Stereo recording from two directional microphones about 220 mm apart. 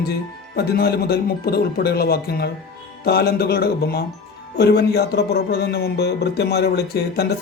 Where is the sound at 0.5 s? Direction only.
45° left (ahead or behind).